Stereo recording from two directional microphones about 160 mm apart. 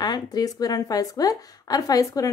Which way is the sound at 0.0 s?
25° left (ahead or behind).